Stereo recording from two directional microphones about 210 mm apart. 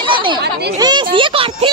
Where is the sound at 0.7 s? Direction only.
20° right (ahead or behind).